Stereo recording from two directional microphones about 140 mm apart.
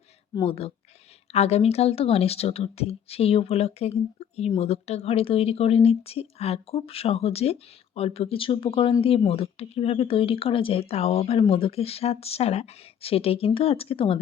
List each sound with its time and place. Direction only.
0.4 s speech: 45° left (ahead or behind)